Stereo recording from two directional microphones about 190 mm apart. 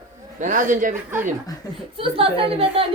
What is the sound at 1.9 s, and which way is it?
Speech, 30° right (ahead or behind).